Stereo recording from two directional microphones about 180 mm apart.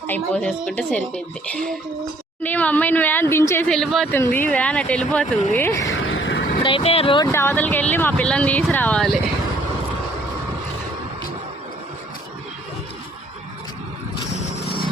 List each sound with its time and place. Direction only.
0.1 s speech: 10° left (ahead or behind)
3.7 s speech: centre (ahead or behind)
5.9 s a sound: 90° left
6.6 s speech: 30° left (ahead or behind)
7.3 s speech: 15° left (ahead or behind)